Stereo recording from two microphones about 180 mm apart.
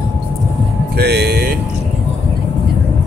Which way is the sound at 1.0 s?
65° right (ahead or behind).